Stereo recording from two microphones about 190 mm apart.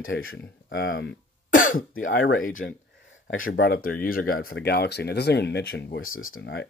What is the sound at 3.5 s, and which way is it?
Speech, 55° left (ahead or behind).